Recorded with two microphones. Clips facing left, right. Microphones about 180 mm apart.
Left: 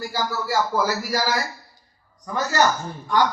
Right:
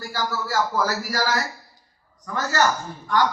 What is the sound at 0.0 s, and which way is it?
A man's voice, 10° left (ahead or behind).